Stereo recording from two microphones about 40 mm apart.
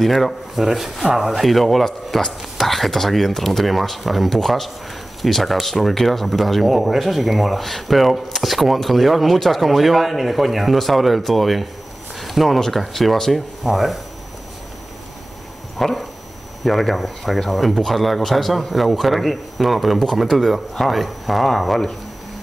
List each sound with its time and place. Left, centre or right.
0.0 s speech: centre
15.8 s dog: centre
16.6 s speech: centre